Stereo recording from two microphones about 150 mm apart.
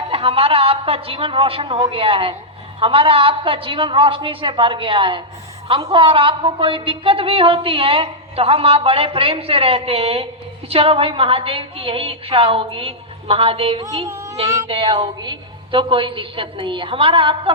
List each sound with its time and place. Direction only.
0.1 s a woman's voice: 40° right (ahead or behind)
14.0 s a sound: 20° right (ahead or behind)
14.7 s a woman's voice: 35° right (ahead or behind)